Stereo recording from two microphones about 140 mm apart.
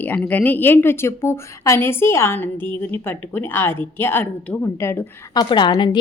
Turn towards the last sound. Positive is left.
turn(degrees=30)  # may be behind; listen again after turning